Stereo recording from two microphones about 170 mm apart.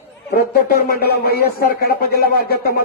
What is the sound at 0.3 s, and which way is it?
Speech, 60° left (ahead or behind).